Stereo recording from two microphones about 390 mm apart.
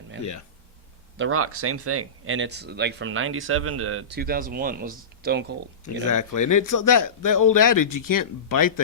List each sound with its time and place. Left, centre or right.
1.1 s speech: right
5.8 s speech: left